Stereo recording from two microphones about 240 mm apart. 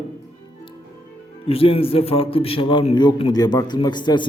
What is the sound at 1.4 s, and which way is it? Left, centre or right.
A man's voice, left.